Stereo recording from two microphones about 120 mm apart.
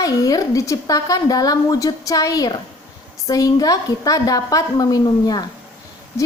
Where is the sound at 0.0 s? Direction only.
30° left (ahead or behind).